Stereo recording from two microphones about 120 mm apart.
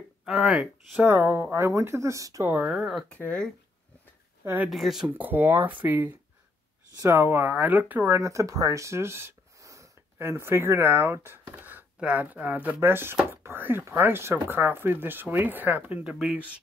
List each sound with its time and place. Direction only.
0.2 s speech: 5° right (ahead or behind)
1.0 s speech: 20° right (ahead or behind)
2.5 s speech: 5° right (ahead or behind)
3.2 s speech: 10° left (ahead or behind)
4.6 s speech: centre (ahead or behind)
5.2 s speech: 15° right (ahead or behind)